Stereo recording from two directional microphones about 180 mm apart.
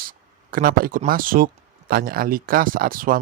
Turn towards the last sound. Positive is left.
turn(degrees=-50)  # may be behind; listen again after turning